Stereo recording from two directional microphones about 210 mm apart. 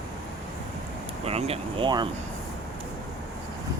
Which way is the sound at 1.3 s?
30° right (ahead or behind).